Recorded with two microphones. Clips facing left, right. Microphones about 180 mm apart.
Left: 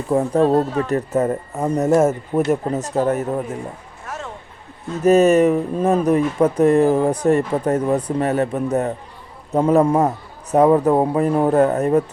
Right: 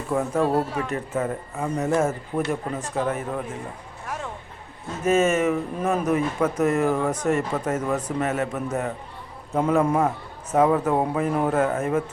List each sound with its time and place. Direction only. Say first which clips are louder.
0.1 s speech: left 6 dB; 30° left (ahead or behind)
0.4 s speech: left 6 dB; 10° right (ahead or behind)
0.9 s speech: left 7 dB; 40° left (ahead or behind)
5.0 s speech: left 7 dB; 40° left (ahead or behind)